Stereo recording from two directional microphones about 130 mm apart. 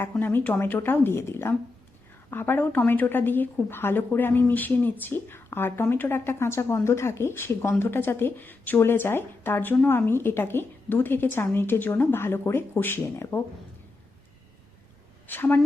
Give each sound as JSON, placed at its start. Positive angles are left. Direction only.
{"t": 0.0, "sound": "a woman's voice", "side_deg": 15}
{"t": 15.3, "sound": "a woman's voice", "side_deg": 15}